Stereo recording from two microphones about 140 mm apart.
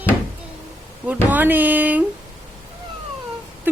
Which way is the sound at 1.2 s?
10° right (ahead or behind).